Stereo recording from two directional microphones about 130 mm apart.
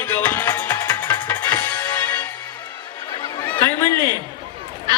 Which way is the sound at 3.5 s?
15° left (ahead or behind).